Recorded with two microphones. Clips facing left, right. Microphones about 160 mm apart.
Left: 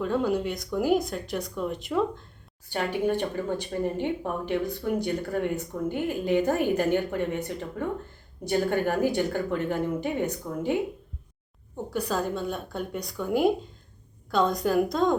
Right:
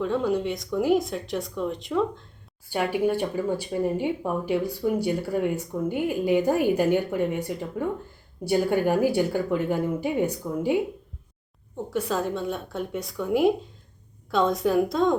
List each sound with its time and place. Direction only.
0.0 s speech: centre (ahead or behind)
2.6 s speech: 10° right (ahead or behind)
11.9 s speech: centre (ahead or behind)